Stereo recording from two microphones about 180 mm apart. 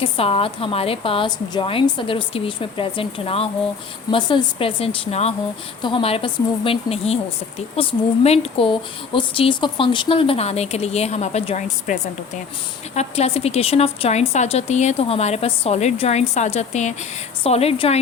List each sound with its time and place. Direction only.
0.0 s speech: 30° left (ahead or behind)